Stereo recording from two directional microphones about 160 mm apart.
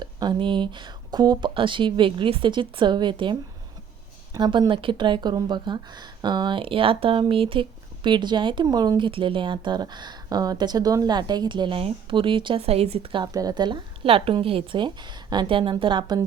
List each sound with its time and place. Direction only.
0.0 s speech: 30° right (ahead or behind)
4.4 s speech: 25° right (ahead or behind)